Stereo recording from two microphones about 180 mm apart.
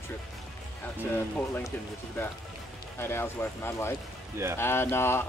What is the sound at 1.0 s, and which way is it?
Speech, 10° left (ahead or behind).